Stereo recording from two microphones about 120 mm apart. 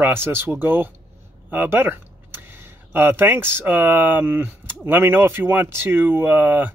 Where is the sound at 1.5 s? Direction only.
15° right (ahead or behind).